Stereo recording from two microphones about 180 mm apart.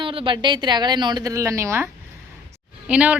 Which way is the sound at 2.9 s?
5° right (ahead or behind).